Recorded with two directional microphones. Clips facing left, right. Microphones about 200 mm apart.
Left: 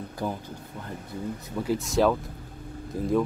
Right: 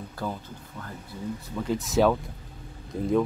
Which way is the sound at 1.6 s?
Centre (ahead or behind).